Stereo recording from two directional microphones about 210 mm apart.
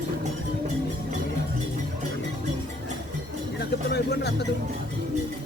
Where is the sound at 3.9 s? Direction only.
50° left (ahead or behind).